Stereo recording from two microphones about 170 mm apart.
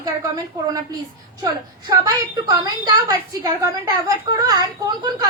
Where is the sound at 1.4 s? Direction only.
20° right (ahead or behind).